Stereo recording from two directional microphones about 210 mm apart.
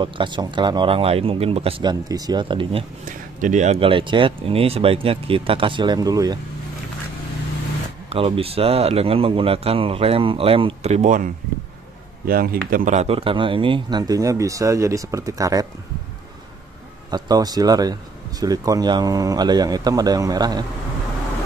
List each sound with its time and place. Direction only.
0.0 s speech: 20° right (ahead or behind)
3.1 s speech: 35° right (ahead or behind); by 6.3 s 15° right (ahead or behind)
8.1 s speech: 25° right (ahead or behind)
17.1 s speech: 20° right (ahead or behind)